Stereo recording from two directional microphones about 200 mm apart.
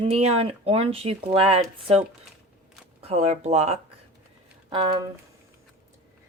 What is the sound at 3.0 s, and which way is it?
Speech, 30° right (ahead or behind).